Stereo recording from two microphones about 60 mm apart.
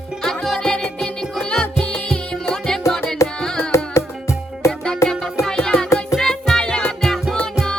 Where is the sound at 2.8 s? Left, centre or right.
Left.